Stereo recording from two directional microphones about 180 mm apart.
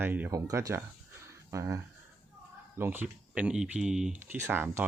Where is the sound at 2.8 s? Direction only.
10° right (ahead or behind).